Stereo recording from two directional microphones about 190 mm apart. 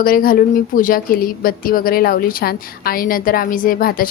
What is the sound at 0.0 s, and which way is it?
A woman's voice, 50° left (ahead or behind).